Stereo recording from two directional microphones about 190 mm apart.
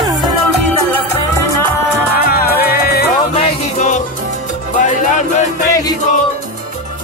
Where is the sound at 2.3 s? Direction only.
55° left (ahead or behind).